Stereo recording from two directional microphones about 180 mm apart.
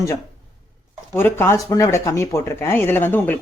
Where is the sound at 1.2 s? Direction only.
15° left (ahead or behind).